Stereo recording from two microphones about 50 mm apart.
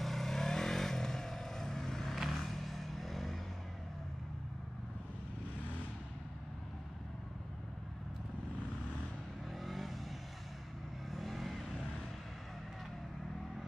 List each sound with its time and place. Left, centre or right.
0.0 s vehicle: centre
9.7 s vehicle: centre
11.1 s vehicle: centre